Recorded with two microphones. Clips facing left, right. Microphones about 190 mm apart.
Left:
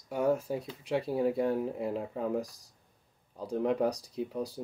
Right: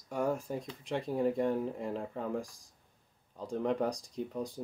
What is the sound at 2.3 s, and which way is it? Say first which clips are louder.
Speech: left 4 dB; 35° left (ahead or behind).